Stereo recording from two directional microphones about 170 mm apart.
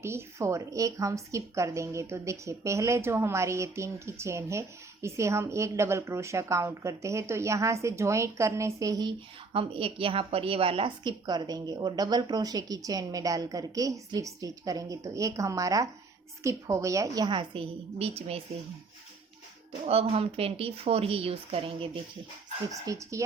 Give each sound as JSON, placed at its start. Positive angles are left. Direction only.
{"t": 0.0, "sound": "a woman's voice", "side_deg": -15}
{"t": 19.8, "sound": "speech", "side_deg": -35}
{"t": 22.7, "sound": "a woman's voice", "side_deg": -20}